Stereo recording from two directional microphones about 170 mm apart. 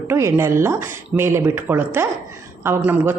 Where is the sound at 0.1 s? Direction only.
15° right (ahead or behind).